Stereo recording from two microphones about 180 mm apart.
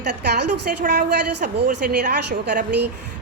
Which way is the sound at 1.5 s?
60° right (ahead or behind).